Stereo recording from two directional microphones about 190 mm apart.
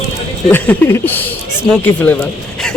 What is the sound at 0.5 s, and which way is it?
Speech, 10° left (ahead or behind).